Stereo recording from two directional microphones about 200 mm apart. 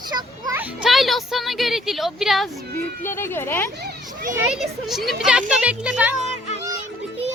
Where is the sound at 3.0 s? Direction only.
10° left (ahead or behind).